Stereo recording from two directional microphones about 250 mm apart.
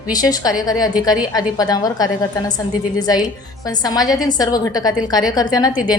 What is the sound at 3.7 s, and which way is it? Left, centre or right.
A woman's voice, centre.